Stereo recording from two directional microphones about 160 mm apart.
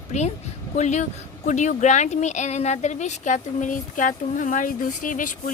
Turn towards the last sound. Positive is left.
turn(degrees=55)  # may be behind; listen again after turning